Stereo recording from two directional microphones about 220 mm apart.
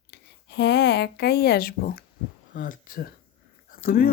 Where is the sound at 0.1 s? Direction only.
50° left (ahead or behind).